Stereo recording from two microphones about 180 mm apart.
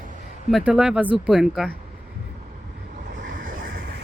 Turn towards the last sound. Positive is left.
turn(degrees=-55)  # may be behind; listen again after turning